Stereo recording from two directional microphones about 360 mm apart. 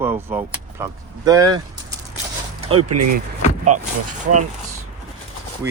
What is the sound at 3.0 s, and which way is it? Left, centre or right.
Speech, right.